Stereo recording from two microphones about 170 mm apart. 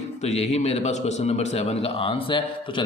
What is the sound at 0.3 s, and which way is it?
A man's voice, 40° left (ahead or behind).